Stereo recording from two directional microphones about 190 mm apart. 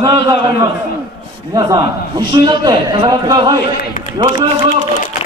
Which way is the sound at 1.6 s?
20° right (ahead or behind).